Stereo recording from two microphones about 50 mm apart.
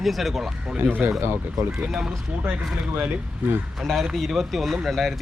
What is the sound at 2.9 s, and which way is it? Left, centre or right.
Speech, right.